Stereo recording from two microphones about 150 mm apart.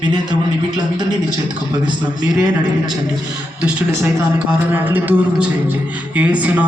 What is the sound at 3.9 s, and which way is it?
A man's voice, 20° right (ahead or behind).